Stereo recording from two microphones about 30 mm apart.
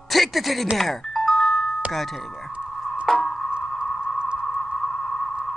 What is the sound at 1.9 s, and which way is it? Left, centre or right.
Speech, centre.